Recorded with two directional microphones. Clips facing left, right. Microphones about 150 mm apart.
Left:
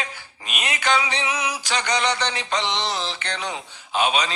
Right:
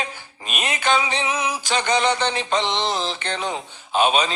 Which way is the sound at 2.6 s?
50° right (ahead or behind).